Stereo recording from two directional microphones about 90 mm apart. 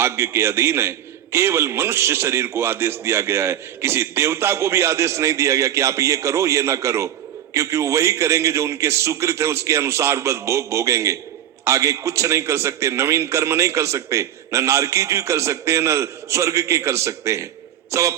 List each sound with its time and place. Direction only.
0.0 s a man's voice: 30° right (ahead or behind)